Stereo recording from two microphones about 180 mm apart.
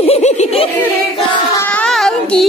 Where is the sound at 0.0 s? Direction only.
35° left (ahead or behind).